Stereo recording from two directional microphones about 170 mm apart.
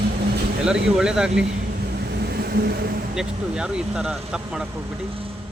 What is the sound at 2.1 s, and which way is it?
Vehicle, 70° right (ahead or behind).